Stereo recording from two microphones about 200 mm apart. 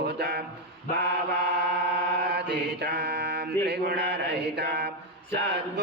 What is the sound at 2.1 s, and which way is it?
Mantra, 55° right (ahead or behind).